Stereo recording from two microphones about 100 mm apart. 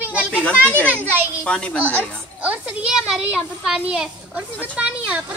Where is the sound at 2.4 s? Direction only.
10° right (ahead or behind).